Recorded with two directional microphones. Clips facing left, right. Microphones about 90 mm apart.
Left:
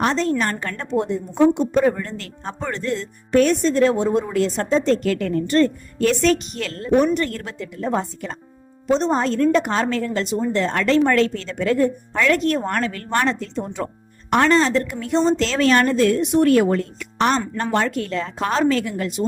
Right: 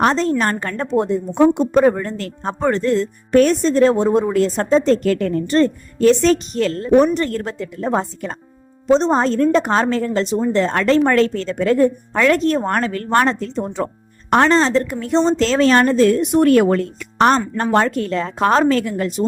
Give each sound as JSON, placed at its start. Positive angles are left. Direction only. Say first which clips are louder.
{"t": 0.0, "sound": "a woman's voice", "louder": "right 4 dB", "side_deg": -45}
{"t": 8.9, "sound": "speech", "louder": "right 4 dB", "side_deg": -30}
{"t": 17.6, "sound": "speech", "louder": "right 4 dB", "side_deg": -45}